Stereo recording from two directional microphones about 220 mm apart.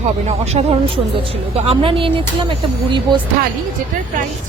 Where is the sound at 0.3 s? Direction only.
30° right (ahead or behind).